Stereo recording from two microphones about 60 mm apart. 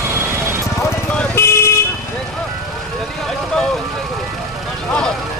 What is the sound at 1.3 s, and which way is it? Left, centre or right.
Vehicle, left.